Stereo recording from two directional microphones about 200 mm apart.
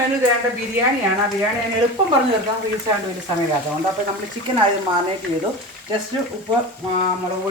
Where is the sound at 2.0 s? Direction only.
25° right (ahead or behind).